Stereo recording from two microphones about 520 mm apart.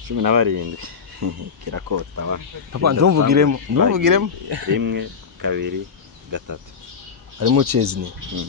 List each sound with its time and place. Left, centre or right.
0.1 s speech: right
7.3 s speech: right